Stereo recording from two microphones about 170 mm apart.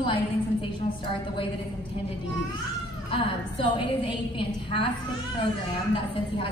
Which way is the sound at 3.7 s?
30° left (ahead or behind).